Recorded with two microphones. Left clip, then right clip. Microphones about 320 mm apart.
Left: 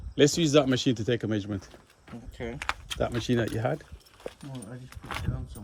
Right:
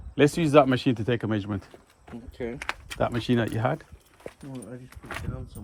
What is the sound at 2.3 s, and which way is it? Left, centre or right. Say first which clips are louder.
Speech: right 3 dB; left.